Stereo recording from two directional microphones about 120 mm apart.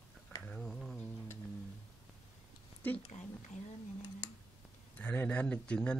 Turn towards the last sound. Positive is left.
turn(degrees=10)  # may be behind; listen again after turning